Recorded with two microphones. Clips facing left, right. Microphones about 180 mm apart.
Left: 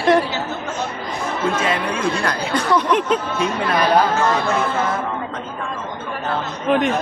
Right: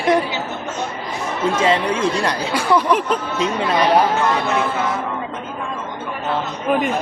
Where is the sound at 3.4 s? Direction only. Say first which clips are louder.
Right 1 dB; 20° right (ahead or behind).